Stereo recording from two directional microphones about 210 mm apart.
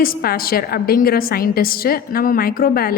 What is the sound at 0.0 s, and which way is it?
A woman's voice, 45° left (ahead or behind).